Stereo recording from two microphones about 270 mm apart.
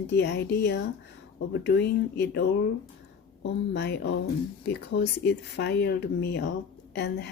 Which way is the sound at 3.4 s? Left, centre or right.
Left.